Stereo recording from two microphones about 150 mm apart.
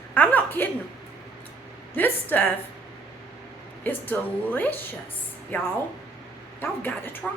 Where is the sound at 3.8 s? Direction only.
10° left (ahead or behind).